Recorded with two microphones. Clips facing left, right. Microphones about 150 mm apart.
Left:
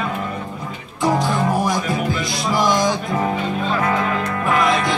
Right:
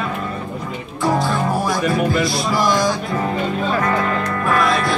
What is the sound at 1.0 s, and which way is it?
Music, 20° left (ahead or behind).